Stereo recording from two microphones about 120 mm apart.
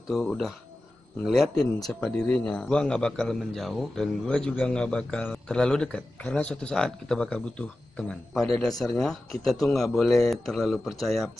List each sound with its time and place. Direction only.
0.1 s a man's voice: 5° left (ahead or behind)